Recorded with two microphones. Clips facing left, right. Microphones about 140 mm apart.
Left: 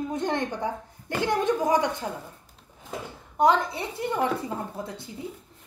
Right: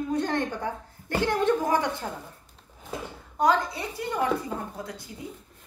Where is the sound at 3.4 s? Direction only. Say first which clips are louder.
Left 2 dB; 25° left (ahead or behind).